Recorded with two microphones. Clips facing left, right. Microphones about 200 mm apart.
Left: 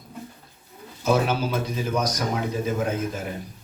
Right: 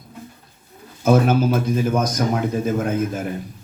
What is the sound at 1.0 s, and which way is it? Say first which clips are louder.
Speech: right 6 dB; 50° right (ahead or behind).